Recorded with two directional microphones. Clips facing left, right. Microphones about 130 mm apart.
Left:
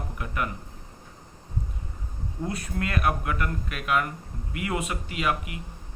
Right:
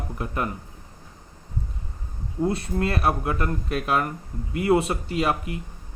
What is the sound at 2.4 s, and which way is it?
Speech, 30° right (ahead or behind).